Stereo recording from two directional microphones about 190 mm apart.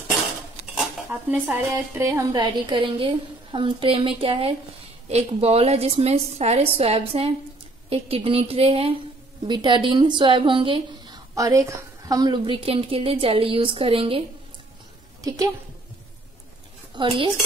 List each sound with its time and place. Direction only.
1.3 s a woman's voice: 10° right (ahead or behind); by 14.2 s 30° right (ahead or behind)
15.2 s a woman's voice: 20° right (ahead or behind)
16.9 s speech: 25° right (ahead or behind)